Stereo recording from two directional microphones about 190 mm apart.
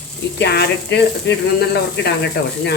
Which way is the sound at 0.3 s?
60° left (ahead or behind).